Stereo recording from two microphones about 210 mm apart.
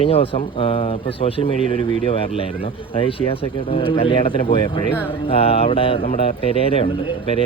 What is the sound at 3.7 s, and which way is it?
Speech, 25° left (ahead or behind).